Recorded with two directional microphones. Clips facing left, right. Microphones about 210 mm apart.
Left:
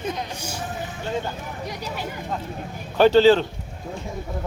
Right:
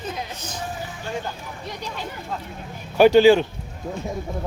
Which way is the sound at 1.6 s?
10° left (ahead or behind).